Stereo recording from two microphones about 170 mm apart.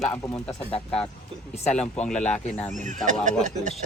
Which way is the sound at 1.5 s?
40° left (ahead or behind).